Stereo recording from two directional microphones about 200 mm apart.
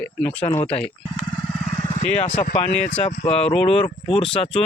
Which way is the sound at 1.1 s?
20° left (ahead or behind).